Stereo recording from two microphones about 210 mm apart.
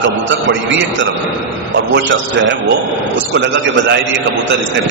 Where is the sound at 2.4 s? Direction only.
60° right (ahead or behind).